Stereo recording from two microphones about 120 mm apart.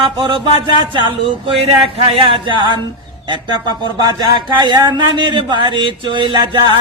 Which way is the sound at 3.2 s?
40° right (ahead or behind).